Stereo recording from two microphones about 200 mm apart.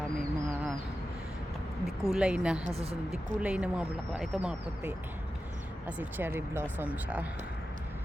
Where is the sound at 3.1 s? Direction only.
5° right (ahead or behind).